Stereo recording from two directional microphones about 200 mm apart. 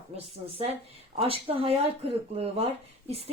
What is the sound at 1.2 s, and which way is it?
A woman's voice, 30° right (ahead or behind).